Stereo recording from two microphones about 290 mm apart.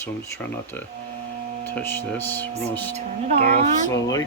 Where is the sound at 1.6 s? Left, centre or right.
Centre.